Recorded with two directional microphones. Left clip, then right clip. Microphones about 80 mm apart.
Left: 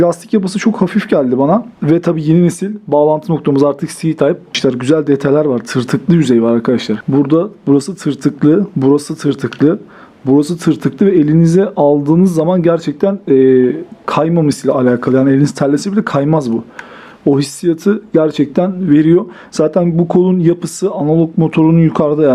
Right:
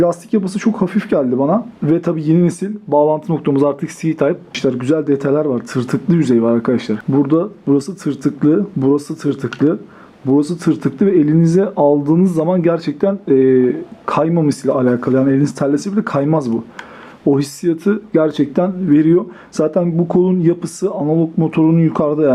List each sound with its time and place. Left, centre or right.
0.0 s speech: left
3.0 s speech: left
14.7 s speech: left
18.9 s speech: left